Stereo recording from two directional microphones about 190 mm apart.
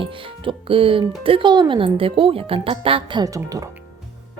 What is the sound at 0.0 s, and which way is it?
Speech, 25° right (ahead or behind).